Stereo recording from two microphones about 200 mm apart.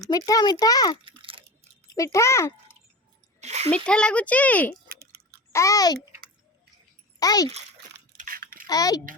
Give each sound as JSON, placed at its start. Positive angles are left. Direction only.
{"t": 0.1, "sound": "a child's voice", "side_deg": 20}
{"t": 1.0, "sound": "a sound", "side_deg": -25}
{"t": 2.0, "sound": "a child's voice", "side_deg": 15}
{"t": 3.4, "sound": "a sound", "side_deg": -35}
{"t": 3.8, "sound": "a child's voice", "side_deg": 5}
{"t": 4.9, "sound": "chewing", "side_deg": -50}
{"t": 5.5, "sound": "a child's voice", "side_deg": 15}
{"t": 7.2, "sound": "a child's voice", "side_deg": 20}
{"t": 8.2, "sound": "a sound", "side_deg": -45}
{"t": 8.6, "sound": "a child's voice", "side_deg": 20}